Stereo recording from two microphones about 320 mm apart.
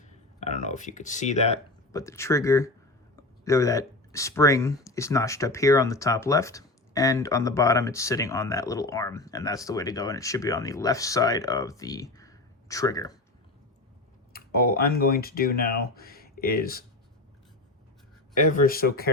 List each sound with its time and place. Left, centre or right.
0.3 s speech: left
1.9 s speech: centre
14.3 s speech: left
18.3 s speech: left